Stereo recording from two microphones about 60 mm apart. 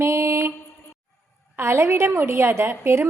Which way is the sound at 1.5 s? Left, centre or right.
Right.